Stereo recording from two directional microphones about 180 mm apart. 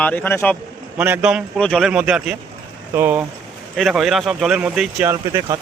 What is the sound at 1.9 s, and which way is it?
Speech, 5° right (ahead or behind).